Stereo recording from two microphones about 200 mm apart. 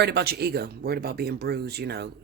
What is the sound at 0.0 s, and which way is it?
Speech, 55° right (ahead or behind).